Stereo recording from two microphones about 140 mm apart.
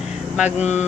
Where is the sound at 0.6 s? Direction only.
55° left (ahead or behind).